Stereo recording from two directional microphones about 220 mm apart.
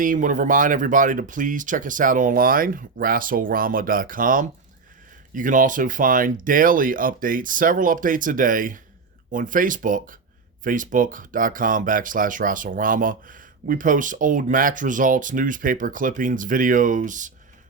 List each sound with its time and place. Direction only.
0.0 s speech: 35° right (ahead or behind)